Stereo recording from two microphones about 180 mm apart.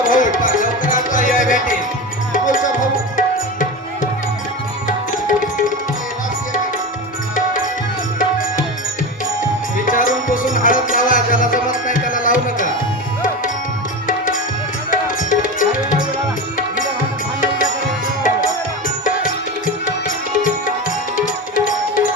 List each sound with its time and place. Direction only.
0.0 s music: 50° left (ahead or behind)
4.9 s tabla: 50° left (ahead or behind)
9.7 s music: 50° left (ahead or behind)
14.8 s music: 50° left (ahead or behind)
21.2 s music: 50° left (ahead or behind)